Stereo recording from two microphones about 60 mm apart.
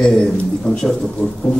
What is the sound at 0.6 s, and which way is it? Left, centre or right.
Speech, centre.